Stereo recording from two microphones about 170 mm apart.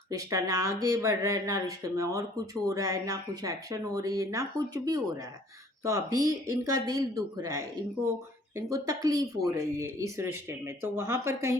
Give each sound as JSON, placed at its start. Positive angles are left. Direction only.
{"t": 0.1, "sound": "speech", "side_deg": -20}